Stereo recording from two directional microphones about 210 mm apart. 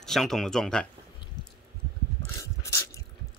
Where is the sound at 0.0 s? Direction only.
Centre (ahead or behind).